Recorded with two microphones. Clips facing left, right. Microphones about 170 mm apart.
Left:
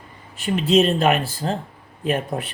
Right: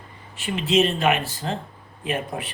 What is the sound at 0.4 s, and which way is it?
Speech, 40° left (ahead or behind).